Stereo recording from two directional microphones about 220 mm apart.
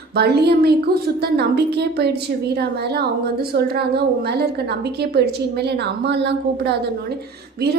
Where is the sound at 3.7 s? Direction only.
50° right (ahead or behind).